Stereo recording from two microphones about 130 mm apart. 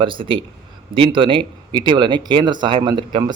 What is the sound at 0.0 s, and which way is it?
A man's voice, 40° right (ahead or behind).